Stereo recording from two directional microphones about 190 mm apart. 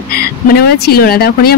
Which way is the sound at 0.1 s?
55° left (ahead or behind).